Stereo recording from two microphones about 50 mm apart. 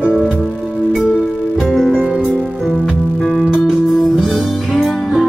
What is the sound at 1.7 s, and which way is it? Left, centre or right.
Music, centre.